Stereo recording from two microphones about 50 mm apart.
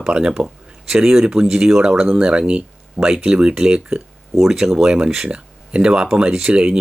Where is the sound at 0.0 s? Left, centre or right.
Centre.